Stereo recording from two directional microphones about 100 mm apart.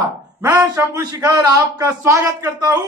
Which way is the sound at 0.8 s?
25° right (ahead or behind).